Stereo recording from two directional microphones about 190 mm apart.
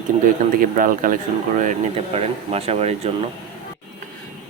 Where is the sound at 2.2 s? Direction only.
30° right (ahead or behind).